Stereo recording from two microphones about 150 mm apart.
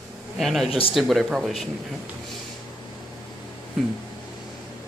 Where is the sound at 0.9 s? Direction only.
Centre (ahead or behind).